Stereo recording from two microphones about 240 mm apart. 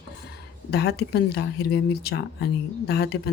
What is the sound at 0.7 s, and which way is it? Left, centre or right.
Speech, left.